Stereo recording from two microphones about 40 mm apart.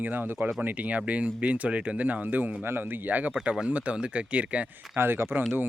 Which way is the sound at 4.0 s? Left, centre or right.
Right.